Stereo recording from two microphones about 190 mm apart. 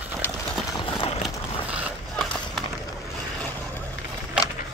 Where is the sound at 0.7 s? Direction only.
30° left (ahead or behind).